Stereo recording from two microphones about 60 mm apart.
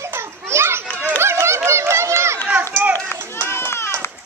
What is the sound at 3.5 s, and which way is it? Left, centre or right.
Run, left.